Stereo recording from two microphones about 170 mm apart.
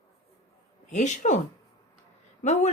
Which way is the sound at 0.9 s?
45° left (ahead or behind).